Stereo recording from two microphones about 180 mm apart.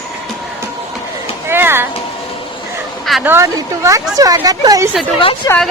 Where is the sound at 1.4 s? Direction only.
10° right (ahead or behind).